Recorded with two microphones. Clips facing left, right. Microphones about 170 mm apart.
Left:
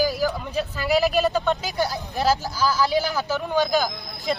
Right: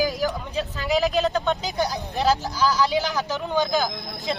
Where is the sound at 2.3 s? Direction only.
Centre (ahead or behind).